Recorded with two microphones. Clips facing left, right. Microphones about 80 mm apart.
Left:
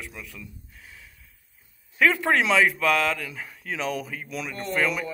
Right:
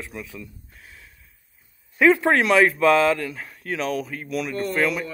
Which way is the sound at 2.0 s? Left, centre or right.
Centre.